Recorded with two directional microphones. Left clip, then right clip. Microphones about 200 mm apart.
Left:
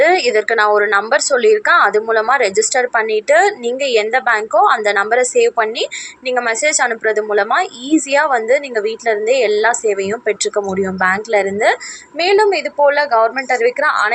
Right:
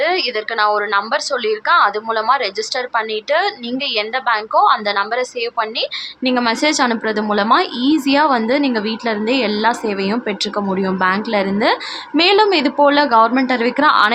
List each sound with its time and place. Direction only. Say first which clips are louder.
0.0 s a woman's voice: left 6 dB; 20° left (ahead or behind)